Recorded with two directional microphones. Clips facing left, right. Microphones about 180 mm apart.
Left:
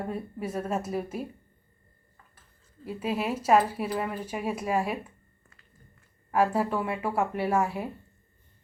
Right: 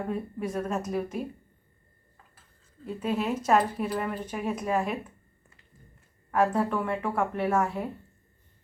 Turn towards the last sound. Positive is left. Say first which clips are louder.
# even
turn(degrees=10)  # may be behind; listen again after turning